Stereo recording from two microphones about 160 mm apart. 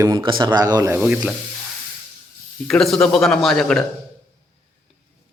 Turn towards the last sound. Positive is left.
turn(degrees=0)  # may be behind; listen again after turning